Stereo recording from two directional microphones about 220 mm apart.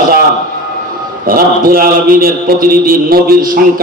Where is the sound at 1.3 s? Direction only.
40° right (ahead or behind).